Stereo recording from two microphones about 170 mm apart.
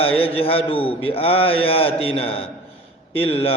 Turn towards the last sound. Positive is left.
turn(degrees=35)  # may be behind; listen again after turning